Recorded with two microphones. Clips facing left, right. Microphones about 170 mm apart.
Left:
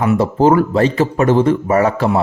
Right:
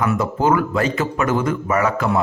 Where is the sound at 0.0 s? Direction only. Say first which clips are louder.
Left 6 dB; 30° left (ahead or behind).